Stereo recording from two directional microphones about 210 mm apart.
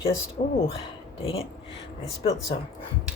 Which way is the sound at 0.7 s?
25° left (ahead or behind).